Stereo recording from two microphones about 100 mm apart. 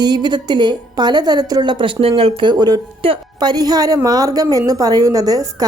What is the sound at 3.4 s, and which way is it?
A woman's voice, 45° right (ahead or behind).